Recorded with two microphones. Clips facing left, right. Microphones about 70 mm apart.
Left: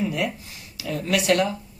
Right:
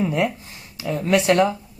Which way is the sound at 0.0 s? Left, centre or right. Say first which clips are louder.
Right 4 dB; right.